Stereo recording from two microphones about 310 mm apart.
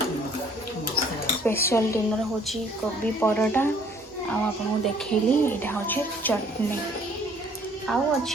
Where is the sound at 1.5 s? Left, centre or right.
Centre.